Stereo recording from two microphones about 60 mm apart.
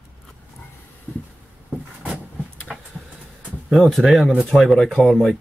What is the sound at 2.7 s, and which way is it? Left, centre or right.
Vehicle, centre.